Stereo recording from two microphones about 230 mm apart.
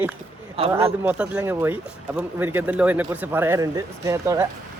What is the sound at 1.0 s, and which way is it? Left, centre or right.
Speech, centre.